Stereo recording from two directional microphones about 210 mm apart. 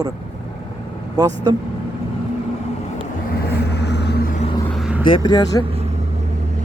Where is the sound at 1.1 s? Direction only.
20° right (ahead or behind).